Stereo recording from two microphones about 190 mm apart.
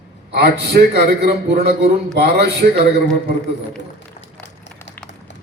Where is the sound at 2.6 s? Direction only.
45° right (ahead or behind).